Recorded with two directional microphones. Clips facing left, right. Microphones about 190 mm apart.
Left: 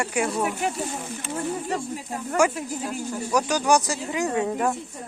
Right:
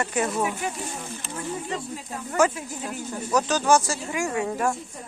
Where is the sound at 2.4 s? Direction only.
10° left (ahead or behind).